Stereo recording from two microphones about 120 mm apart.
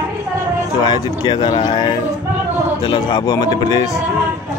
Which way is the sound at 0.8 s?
35° left (ahead or behind).